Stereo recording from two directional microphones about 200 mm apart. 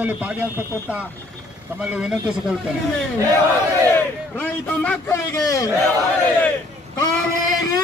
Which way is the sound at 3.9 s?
10° left (ahead or behind).